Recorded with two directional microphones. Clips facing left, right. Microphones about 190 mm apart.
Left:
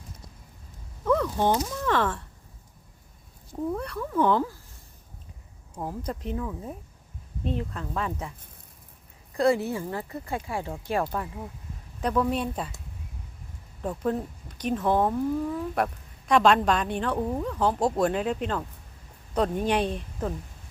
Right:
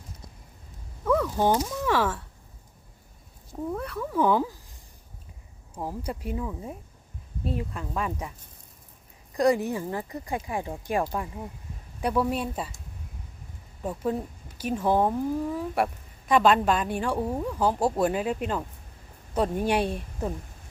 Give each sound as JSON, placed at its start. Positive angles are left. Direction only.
{"t": 1.1, "sound": "speech", "side_deg": -5}
{"t": 3.7, "sound": "speech", "side_deg": 0}
{"t": 5.7, "sound": "speech", "side_deg": -10}
{"t": 9.4, "sound": "speech", "side_deg": -15}
{"t": 13.8, "sound": "speech", "side_deg": -10}